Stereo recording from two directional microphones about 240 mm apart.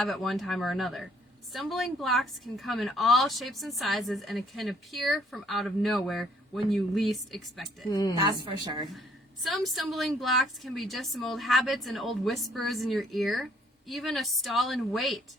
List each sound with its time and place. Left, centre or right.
0.0 s a woman's voice: centre
7.9 s a woman's voice: centre
8.2 s a woman's voice: centre
9.4 s a woman's voice: centre